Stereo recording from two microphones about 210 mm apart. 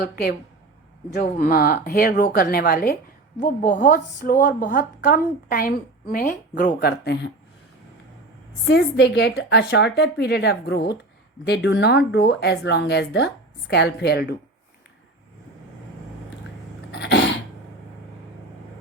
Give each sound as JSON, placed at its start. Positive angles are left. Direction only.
{"t": 1.1, "sound": "a woman's voice", "side_deg": 45}
{"t": 6.7, "sound": "speech", "side_deg": 50}
{"t": 8.6, "sound": "speech", "side_deg": 55}
{"t": 16.9, "sound": "cough", "side_deg": 55}